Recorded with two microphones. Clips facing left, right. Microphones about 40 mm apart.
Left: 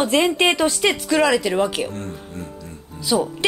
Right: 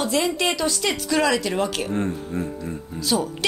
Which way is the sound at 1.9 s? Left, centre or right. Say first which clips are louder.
Right 6 dB; right.